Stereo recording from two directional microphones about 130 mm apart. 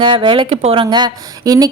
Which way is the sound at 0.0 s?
40° right (ahead or behind).